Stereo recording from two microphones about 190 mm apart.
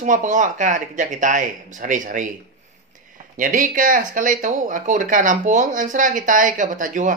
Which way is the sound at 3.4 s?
45° right (ahead or behind).